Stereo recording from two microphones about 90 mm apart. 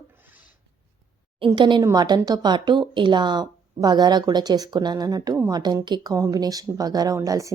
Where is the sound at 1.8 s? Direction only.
45° right (ahead or behind).